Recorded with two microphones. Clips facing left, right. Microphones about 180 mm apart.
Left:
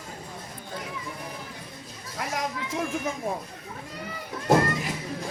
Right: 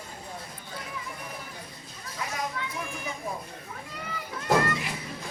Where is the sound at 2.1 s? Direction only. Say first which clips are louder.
Left 3 dB; 75° left (ahead or behind).